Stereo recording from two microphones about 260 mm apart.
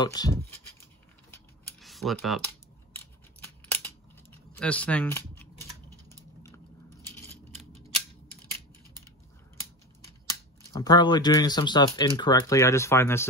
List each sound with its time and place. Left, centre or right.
0.0 s speech: centre
1.3 s typing: centre
3.3 s a sound: centre
7.1 s scissors: centre
10.2 s speech: centre